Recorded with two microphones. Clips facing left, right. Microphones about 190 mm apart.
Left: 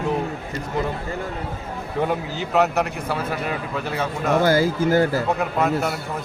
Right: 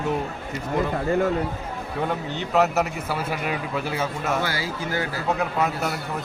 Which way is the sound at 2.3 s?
Centre (ahead or behind).